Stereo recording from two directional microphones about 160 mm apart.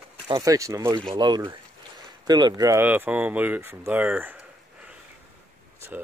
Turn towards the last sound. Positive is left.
turn(degrees=-10)  # may be behind; listen again after turning